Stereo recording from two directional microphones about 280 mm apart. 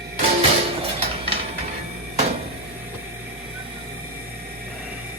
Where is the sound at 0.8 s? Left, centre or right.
Right.